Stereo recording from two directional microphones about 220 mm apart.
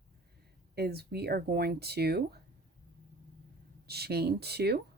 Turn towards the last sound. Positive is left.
turn(degrees=-45)  # may be behind; listen again after turning